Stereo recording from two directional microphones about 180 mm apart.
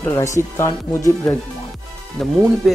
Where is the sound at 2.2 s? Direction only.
Centre (ahead or behind).